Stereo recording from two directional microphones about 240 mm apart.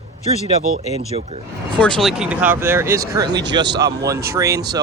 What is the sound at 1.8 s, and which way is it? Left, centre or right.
Speech, centre.